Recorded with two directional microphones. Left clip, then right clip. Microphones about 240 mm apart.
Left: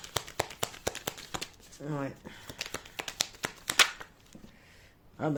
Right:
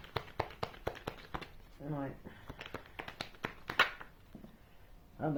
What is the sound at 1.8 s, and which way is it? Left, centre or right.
Speech, left.